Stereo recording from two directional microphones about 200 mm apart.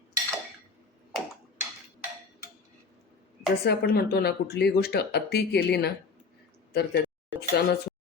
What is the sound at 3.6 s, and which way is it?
Speech, 55° left (ahead or behind).